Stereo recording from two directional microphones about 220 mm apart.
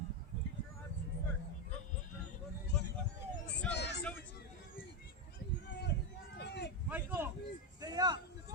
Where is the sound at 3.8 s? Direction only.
50° left (ahead or behind).